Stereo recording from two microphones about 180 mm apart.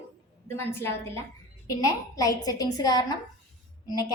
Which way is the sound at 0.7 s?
15° left (ahead or behind).